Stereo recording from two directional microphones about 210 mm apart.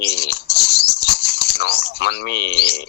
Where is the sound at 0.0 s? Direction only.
50° left (ahead or behind).